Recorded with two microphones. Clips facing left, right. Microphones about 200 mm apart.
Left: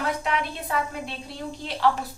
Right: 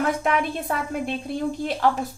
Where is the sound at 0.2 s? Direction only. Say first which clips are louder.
Right 5 dB; 50° right (ahead or behind).